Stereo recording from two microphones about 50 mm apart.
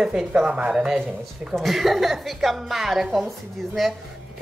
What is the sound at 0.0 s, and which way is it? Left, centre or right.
A man's voice, centre.